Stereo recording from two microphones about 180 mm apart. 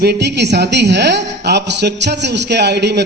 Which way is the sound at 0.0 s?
65° right (ahead or behind).